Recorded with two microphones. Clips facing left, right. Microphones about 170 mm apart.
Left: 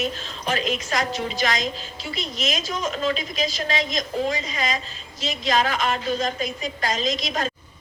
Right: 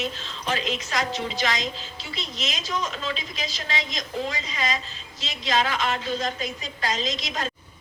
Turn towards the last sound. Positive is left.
turn(degrees=50)  # may be behind; listen again after turning